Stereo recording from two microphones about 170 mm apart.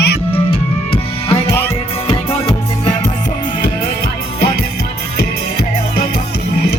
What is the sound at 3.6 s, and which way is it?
Music, 60° left (ahead or behind).